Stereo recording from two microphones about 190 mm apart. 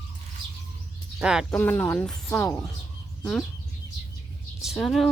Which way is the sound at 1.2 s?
5° right (ahead or behind).